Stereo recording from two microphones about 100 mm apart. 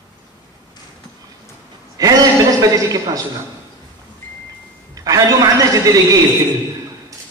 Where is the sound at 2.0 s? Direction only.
35° right (ahead or behind).